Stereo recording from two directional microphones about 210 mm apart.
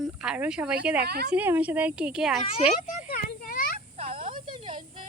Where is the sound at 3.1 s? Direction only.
45° left (ahead or behind).